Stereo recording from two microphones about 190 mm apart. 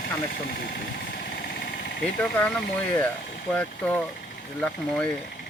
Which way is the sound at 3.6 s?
10° left (ahead or behind).